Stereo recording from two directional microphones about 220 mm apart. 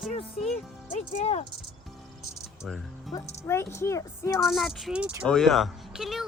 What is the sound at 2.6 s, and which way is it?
Speech, centre (ahead or behind).